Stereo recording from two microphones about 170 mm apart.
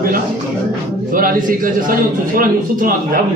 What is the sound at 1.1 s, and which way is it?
A man's voice, 55° right (ahead or behind).